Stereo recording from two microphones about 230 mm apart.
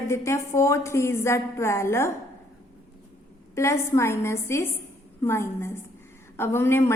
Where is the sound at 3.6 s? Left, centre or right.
Centre.